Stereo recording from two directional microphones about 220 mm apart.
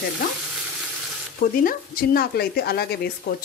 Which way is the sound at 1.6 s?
40° left (ahead or behind).